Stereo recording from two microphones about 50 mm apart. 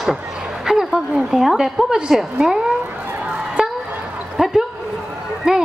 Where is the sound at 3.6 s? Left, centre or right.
Centre.